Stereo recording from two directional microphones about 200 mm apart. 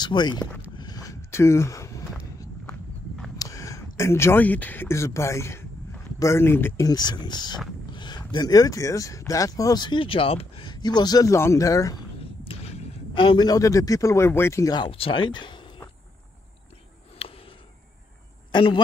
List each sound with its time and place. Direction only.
0.0 s speech: 20° left (ahead or behind)
0.7 s a sound: 20° left (ahead or behind)
3.3 s speech: 15° left (ahead or behind)
12.4 s a man's voice: 25° left (ahead or behind)
17.2 s a sound: 30° left (ahead or behind)
18.5 s a man's voice: 25° left (ahead or behind)